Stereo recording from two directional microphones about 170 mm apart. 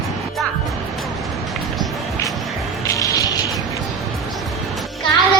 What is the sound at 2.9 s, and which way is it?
Music, 20° left (ahead or behind).